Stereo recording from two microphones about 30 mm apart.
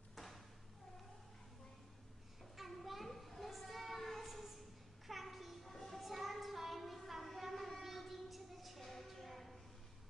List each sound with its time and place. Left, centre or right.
0.1 s cat: centre
2.7 s children playing: centre
3.7 s child singing: centre
5.0 s a sound: centre
9.0 s music: centre